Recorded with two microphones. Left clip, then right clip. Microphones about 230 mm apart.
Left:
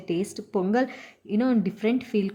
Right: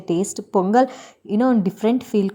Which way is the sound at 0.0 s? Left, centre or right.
Right.